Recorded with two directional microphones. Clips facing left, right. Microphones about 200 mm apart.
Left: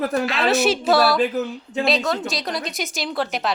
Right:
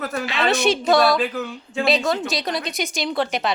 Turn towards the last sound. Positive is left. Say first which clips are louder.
# right 2 dB
turn(degrees=0)  # may be behind; listen again after turning